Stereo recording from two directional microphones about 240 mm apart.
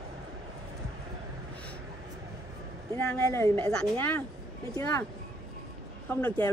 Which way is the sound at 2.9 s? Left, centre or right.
Centre.